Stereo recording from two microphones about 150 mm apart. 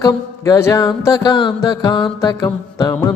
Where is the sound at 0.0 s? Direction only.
25° left (ahead or behind).